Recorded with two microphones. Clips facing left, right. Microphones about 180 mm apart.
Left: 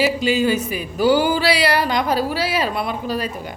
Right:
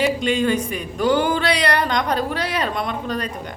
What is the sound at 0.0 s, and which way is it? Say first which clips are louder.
Speech: left 1 dB; 5° left (ahead or behind).